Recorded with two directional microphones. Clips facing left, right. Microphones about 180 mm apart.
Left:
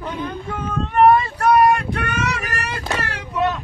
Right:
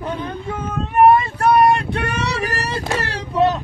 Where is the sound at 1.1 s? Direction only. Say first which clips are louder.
Right 1 dB; 30° right (ahead or behind).